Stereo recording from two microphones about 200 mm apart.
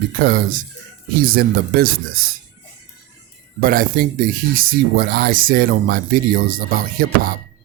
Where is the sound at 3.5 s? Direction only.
45° right (ahead or behind).